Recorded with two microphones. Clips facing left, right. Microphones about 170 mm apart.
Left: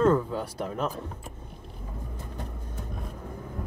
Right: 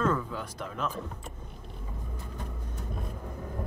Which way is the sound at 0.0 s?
30° left (ahead or behind).